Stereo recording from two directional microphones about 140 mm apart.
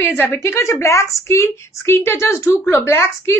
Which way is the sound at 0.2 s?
15° left (ahead or behind).